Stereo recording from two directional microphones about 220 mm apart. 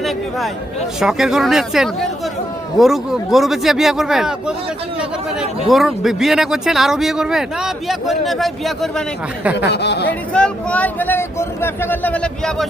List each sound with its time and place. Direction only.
0.0 s speech: centre (ahead or behind)
5.6 s speech: centre (ahead or behind)
9.6 s speech: 50° left (ahead or behind)
10.3 s speech: 5° left (ahead or behind)